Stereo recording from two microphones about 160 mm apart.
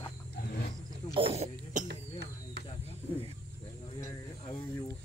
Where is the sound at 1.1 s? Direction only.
35° right (ahead or behind).